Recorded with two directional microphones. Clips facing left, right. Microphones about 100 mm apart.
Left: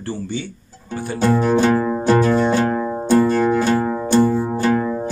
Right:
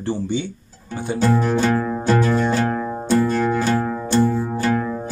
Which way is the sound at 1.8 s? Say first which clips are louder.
Left 3 dB; 10° left (ahead or behind).